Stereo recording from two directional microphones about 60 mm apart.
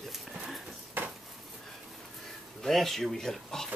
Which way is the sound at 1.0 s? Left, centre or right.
Right.